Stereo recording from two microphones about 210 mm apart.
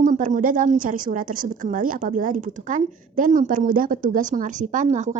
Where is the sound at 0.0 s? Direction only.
35° right (ahead or behind).